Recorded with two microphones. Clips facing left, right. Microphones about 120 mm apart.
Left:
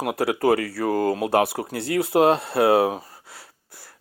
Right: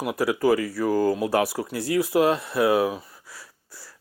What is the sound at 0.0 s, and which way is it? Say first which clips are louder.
Speech: left 1 dB; 65° left (ahead or behind).